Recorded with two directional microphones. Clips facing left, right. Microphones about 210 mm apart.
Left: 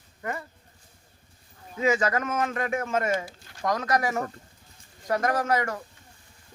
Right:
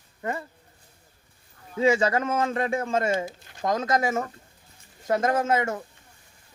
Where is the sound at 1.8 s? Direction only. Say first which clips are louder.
Right 3 dB; 30° right (ahead or behind).